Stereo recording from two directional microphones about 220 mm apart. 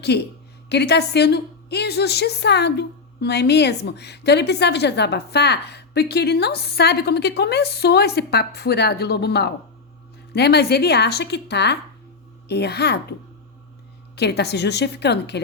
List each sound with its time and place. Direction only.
0.1 s a woman's voice: 50° left (ahead or behind)
14.2 s a woman's voice: 50° left (ahead or behind)